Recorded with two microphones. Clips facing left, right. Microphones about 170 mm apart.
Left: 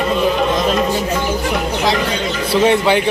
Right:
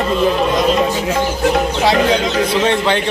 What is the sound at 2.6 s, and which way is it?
Speech, 10° left (ahead or behind).